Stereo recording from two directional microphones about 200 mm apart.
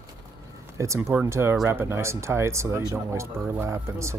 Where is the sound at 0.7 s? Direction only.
15° right (ahead or behind).